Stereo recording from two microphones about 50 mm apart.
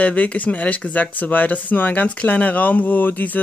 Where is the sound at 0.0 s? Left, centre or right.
Left.